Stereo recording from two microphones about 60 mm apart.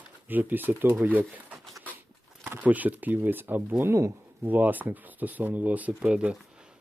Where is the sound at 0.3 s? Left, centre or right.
Right.